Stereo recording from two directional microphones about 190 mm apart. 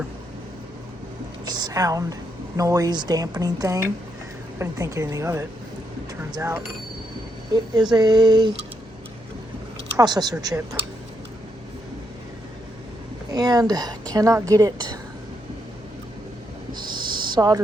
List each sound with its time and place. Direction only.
1.5 s a woman's voice: 20° right (ahead or behind)
10.0 s speech: 20° right (ahead or behind)
13.3 s speech: 20° right (ahead or behind)
17.2 s a sound: 20° right (ahead or behind)